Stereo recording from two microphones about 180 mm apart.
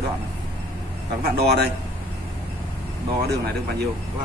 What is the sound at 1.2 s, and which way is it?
Speech, 60° right (ahead or behind).